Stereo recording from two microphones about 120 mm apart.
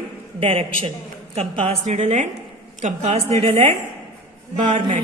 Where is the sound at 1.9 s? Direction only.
75° right (ahead or behind).